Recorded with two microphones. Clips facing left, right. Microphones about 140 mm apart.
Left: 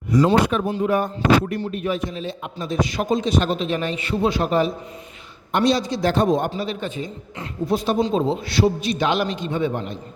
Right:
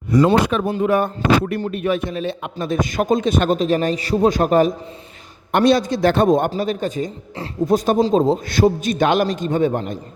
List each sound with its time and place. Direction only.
0.1 s speech: 60° right (ahead or behind)